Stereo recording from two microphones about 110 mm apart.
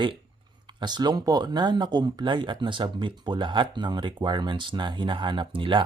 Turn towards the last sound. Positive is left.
turn(degrees=-50)  # may be behind; listen again after turning